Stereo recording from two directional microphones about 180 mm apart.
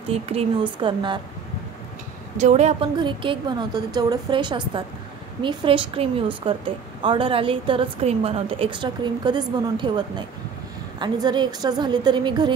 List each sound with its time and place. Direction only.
0.1 s a woman's voice: 35° right (ahead or behind)
2.3 s a woman's voice: 40° right (ahead or behind)
3.0 s a woman's voice: 25° right (ahead or behind)